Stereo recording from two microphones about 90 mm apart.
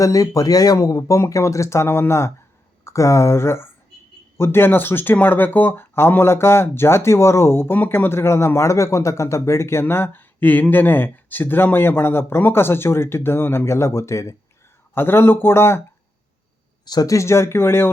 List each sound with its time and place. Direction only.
0.0 s speech: 40° left (ahead or behind)
16.8 s speech: 45° left (ahead or behind); by 17.9 s 25° left (ahead or behind)